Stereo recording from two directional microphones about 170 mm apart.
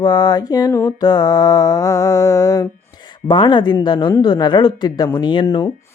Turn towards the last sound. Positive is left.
turn(degrees=25)  # may be behind; listen again after turning